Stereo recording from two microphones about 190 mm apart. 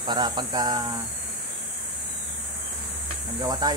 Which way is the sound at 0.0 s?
25° right (ahead or behind).